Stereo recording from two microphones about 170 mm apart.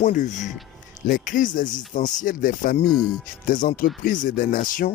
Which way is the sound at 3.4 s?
50° left (ahead or behind).